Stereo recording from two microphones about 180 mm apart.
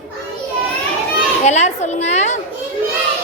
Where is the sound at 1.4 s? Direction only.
40° left (ahead or behind).